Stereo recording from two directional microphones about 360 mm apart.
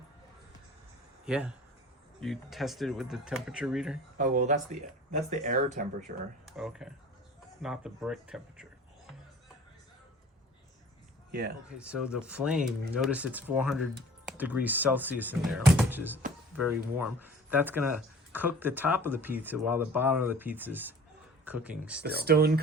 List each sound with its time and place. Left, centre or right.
1.2 s speech: centre
4.2 s speech: right
6.4 s speech: centre
11.3 s speech: right
11.7 s speech: centre
22.0 s speech: right